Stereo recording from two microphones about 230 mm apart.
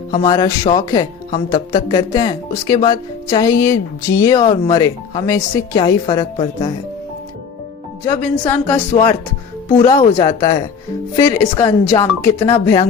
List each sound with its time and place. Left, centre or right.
0.1 s speech: centre
8.0 s speech: centre